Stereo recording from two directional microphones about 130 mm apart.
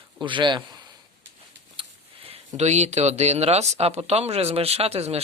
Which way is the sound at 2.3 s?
60° right (ahead or behind).